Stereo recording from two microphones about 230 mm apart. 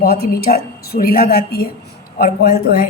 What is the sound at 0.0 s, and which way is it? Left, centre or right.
A woman's voice, left.